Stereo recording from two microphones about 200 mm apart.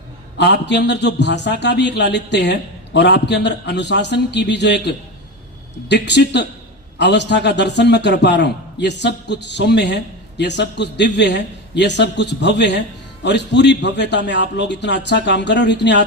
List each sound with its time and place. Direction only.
0.3 s a man's voice: 60° left (ahead or behind)